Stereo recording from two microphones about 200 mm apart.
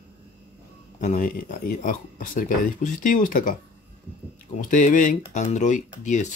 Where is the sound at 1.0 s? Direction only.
40° left (ahead or behind).